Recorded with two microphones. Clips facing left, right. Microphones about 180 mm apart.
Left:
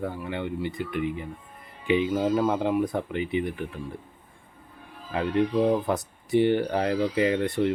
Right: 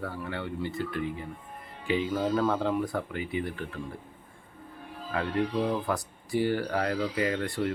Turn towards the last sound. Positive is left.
turn(degrees=20)  # may be behind; listen again after turning